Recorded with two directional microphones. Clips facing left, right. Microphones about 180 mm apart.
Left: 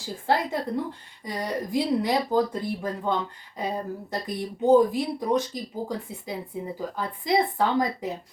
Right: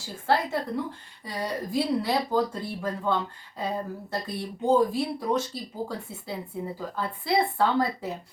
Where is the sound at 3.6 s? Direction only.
15° left (ahead or behind).